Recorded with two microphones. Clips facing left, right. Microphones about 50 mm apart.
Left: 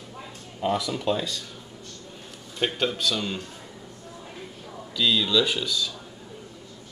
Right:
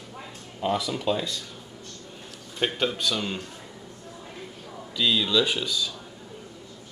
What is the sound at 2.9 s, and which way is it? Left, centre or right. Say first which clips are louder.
Speech: left 1 dB; centre.